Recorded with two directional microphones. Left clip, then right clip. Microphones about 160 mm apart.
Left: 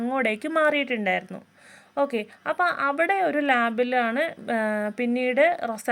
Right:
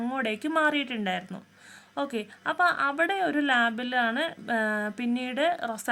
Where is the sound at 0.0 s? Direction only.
20° left (ahead or behind).